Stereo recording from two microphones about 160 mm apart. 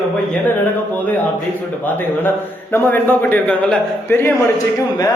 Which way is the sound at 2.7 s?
10° left (ahead or behind).